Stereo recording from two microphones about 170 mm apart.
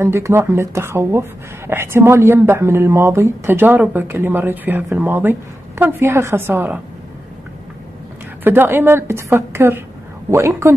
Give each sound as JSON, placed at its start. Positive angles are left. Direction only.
{"t": 0.0, "sound": "speech", "side_deg": -15}
{"t": 8.5, "sound": "speech", "side_deg": -10}